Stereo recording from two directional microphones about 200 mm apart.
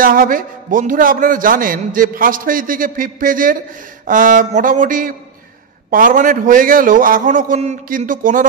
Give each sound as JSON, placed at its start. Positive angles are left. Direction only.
{"t": 0.0, "sound": "a man's voice", "side_deg": -45}